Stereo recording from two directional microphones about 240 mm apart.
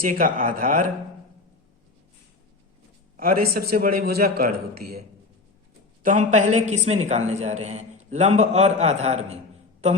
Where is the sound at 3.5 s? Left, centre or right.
Right.